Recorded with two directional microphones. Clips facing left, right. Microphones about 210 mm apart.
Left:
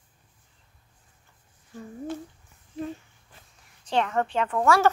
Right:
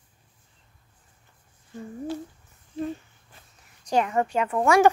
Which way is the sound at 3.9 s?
10° right (ahead or behind).